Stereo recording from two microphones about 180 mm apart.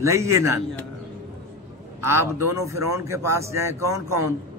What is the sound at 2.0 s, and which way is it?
A man's voice, 15° right (ahead or behind).